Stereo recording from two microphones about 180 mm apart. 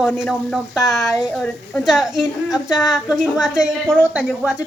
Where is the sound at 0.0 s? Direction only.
5° left (ahead or behind).